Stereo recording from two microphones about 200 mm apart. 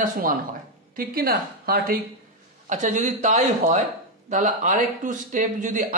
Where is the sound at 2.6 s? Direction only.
40° right (ahead or behind).